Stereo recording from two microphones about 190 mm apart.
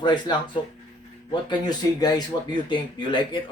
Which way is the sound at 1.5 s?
20° left (ahead or behind).